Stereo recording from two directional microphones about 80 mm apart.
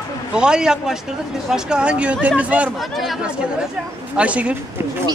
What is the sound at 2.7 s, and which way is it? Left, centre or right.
Speech, centre.